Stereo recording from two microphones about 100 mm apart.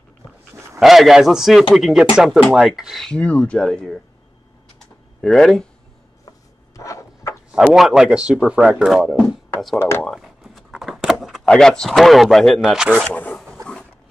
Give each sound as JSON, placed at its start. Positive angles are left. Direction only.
{"t": 0.7, "sound": "speech", "side_deg": 0}
{"t": 3.1, "sound": "speech", "side_deg": 10}
{"t": 4.7, "sound": "computer keyboard", "side_deg": 5}
{"t": 6.8, "sound": "a sound", "side_deg": 30}
{"t": 7.5, "sound": "speech", "side_deg": -5}
{"t": 9.8, "sound": "speech", "side_deg": 25}
{"t": 10.0, "sound": "a sound", "side_deg": 0}
{"t": 11.4, "sound": "speech", "side_deg": 5}
{"t": 13.1, "sound": "speech", "side_deg": 15}